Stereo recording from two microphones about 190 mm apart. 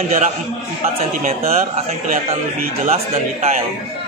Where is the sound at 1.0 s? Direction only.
45° right (ahead or behind).